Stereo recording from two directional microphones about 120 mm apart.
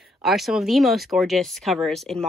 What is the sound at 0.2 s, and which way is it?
Speech, centre (ahead or behind).